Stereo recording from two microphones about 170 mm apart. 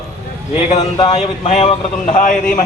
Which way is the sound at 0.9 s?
40° left (ahead or behind).